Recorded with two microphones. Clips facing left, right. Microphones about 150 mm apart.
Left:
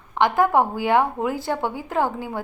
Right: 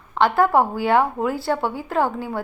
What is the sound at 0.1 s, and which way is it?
A woman's voice, 15° left (ahead or behind).